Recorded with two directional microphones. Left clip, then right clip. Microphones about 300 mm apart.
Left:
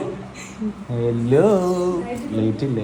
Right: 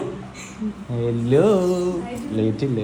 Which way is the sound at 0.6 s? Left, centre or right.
Centre.